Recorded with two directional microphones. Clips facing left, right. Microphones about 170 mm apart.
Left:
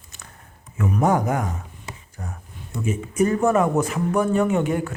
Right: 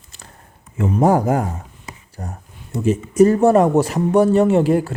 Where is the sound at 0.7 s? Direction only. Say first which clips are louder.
Right 5 dB; 30° right (ahead or behind).